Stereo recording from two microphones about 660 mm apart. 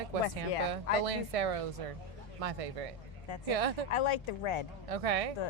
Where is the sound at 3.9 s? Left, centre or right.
Left.